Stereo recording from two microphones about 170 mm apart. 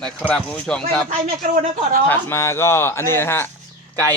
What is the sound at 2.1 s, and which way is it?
A man's voice, 15° left (ahead or behind).